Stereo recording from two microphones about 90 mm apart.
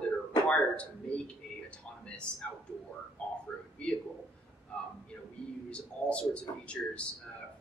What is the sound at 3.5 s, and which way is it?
Speech, 10° left (ahead or behind).